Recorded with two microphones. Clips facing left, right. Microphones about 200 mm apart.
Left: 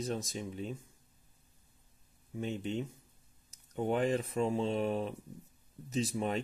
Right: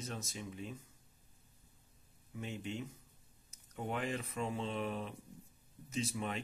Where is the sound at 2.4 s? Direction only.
30° left (ahead or behind).